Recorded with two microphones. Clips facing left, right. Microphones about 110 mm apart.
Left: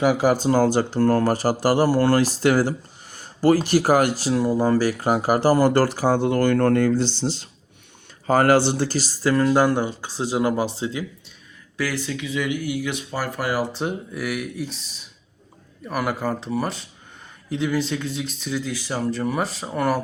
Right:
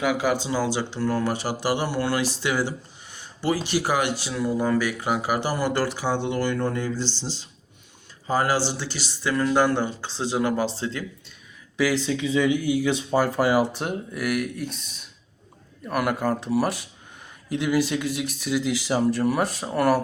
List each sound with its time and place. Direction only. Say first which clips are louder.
0.0 s speech: left 5 dB; 35° left (ahead or behind)
10.2 s speech: left 2 dB; 15° left (ahead or behind)
11.8 s speech: right 4 dB; 15° right (ahead or behind)
13.7 s speech: left 2 dB; centre (ahead or behind)